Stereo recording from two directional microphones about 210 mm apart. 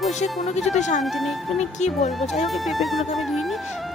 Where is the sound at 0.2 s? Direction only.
35° left (ahead or behind).